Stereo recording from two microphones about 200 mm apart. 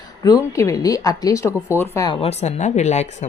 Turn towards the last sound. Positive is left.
turn(degrees=35)  # may be behind; listen again after turning